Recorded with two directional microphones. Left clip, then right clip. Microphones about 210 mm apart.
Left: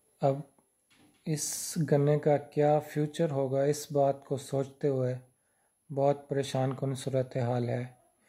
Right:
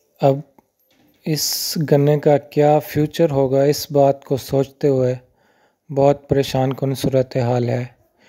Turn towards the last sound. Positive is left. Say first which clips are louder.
# right 12 dB
turn(degrees=-40)  # may be behind; listen again after turning